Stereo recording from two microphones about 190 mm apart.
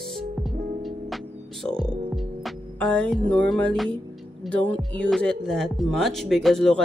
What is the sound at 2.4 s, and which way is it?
Music, 5° left (ahead or behind).